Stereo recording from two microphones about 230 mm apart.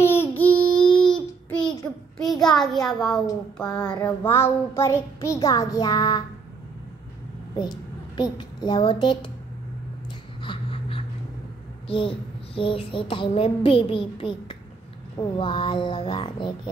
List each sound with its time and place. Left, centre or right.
0.0 s a sound: centre
1.1 s child singing: centre
2.9 s a woman's voice: centre
3.5 s child singing: centre
8.2 s child singing: centre
10.4 s a sound: left
11.9 s child singing: left